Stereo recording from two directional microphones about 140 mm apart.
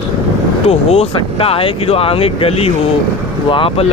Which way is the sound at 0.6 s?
45° left (ahead or behind).